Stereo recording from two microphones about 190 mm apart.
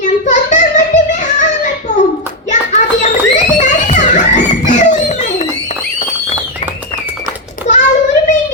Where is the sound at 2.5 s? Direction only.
40° left (ahead or behind).